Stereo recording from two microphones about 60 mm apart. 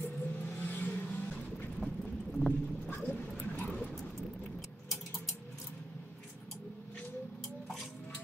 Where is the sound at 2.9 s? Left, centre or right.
Left.